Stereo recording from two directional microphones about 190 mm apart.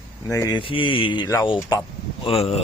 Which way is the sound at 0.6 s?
25° left (ahead or behind).